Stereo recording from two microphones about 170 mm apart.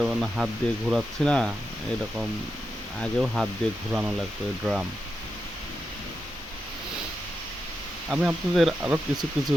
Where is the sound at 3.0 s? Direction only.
Centre (ahead or behind).